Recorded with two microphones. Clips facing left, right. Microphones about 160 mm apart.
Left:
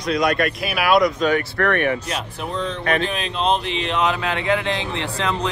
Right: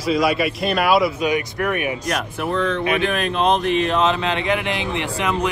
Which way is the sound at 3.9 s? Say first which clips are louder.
Right 2 dB; 25° right (ahead or behind).